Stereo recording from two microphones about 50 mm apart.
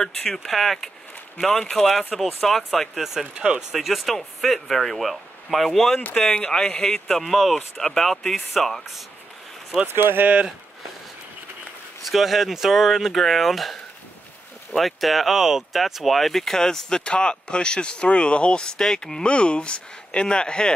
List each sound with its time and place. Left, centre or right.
0.0 s speech: centre
3.3 s speech: right
3.7 s speech: centre
5.9 s speech: left; by 9.0 s centre
9.8 s speech: right
12.1 s speech: centre
19.2 s speech: left